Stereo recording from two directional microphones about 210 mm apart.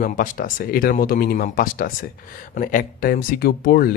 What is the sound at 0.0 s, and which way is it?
Speech, 40° left (ahead or behind).